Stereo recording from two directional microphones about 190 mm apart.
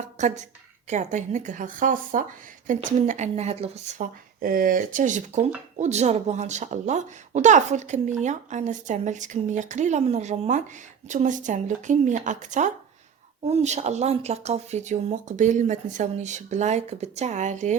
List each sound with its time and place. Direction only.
0.2 s a woman's voice: 40° right (ahead or behind)
4.4 s speech: 50° right (ahead or behind)